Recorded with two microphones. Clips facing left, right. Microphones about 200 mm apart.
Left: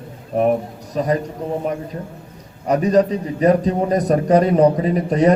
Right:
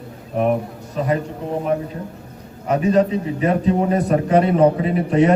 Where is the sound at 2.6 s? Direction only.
40° left (ahead or behind).